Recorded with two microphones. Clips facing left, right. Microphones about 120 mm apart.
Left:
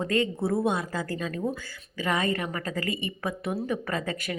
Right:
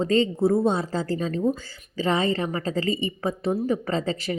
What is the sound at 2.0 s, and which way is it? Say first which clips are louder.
Speech: right 4 dB; 25° right (ahead or behind).